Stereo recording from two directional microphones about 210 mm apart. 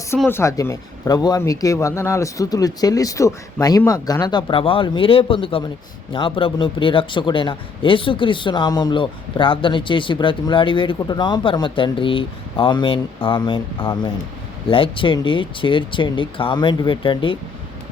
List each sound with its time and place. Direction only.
0.2 s speech: 10° left (ahead or behind)